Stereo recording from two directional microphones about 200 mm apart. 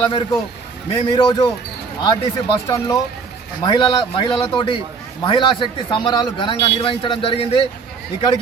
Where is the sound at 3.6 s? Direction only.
25° left (ahead or behind).